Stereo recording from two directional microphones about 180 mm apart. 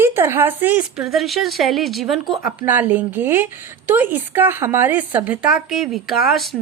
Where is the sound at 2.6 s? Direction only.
10° right (ahead or behind).